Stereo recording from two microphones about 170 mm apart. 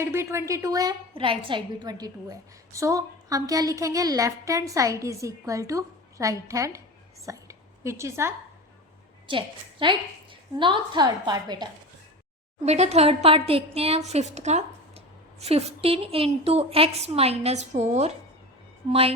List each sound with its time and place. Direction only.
0.0 s a woman's voice: 15° right (ahead or behind)
1.1 s a woman's voice: 30° right (ahead or behind)
9.2 s a woman's voice: 30° right (ahead or behind)
12.6 s a woman's voice: 40° right (ahead or behind)